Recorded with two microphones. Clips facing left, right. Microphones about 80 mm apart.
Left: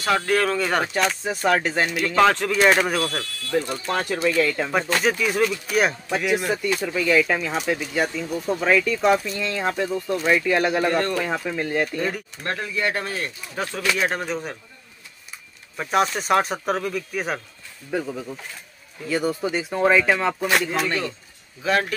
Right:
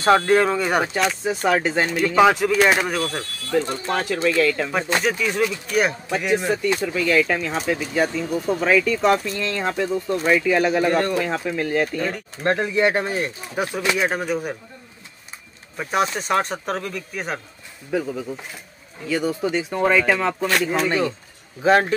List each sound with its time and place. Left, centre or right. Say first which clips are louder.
0.0 s speech: right 5 dB; right; by 0.9 s centre
0.9 s speech: right 1 dB; centre
11.0 s speech: right 2 dB; centre
11.2 s speech: right 2 dB; centre
12.4 s speech: right 7 dB; right; by 14.6 s centre
15.8 s speech: left 1 dB; centre
20.8 s speech: right 4 dB; centre
21.6 s speech: right 6 dB; right